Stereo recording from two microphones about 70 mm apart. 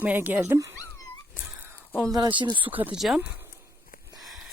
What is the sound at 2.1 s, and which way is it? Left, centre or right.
Speech, right.